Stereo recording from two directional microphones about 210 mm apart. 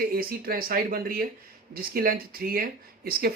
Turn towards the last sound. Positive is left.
turn(degrees=-45)  # may be behind; listen again after turning